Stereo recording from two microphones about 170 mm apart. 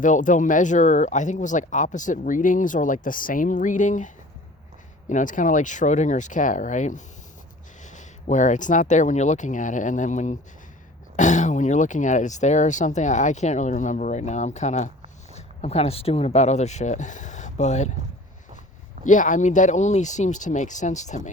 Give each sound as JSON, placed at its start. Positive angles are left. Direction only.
{"t": 0.0, "sound": "speech", "side_deg": 50}
{"t": 19.0, "sound": "speech", "side_deg": 50}